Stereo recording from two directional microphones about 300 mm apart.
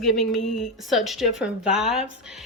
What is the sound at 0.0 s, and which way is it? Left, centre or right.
A woman's voice, centre.